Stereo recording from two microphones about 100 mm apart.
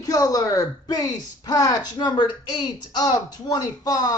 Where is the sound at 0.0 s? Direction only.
40° left (ahead or behind).